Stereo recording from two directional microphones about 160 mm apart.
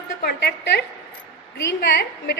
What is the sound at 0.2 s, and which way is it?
Speech, 85° left.